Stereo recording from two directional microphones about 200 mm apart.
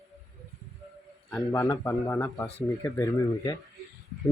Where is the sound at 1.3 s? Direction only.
15° left (ahead or behind).